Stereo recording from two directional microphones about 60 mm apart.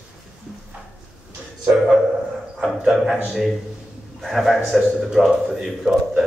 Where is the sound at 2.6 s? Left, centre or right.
Centre.